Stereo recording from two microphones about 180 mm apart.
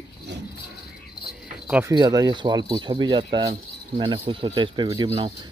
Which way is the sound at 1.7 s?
15° right (ahead or behind).